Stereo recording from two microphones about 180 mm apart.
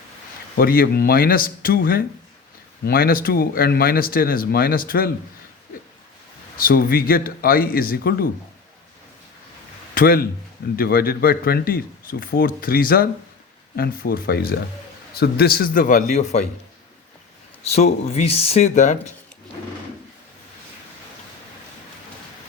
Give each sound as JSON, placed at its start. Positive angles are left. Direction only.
{"t": 0.5, "sound": "speech", "side_deg": 55}
{"t": 6.6, "sound": "speech", "side_deg": 55}
{"t": 9.9, "sound": "speech", "side_deg": 55}
{"t": 17.7, "sound": "speech", "side_deg": 35}